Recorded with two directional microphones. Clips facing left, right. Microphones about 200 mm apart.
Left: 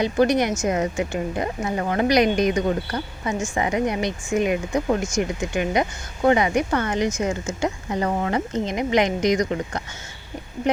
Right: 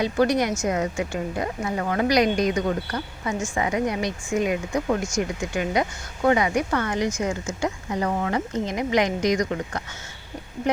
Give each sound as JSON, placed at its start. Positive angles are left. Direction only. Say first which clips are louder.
{"t": 0.0, "sound": "speech", "louder": "left 2 dB", "side_deg": 20}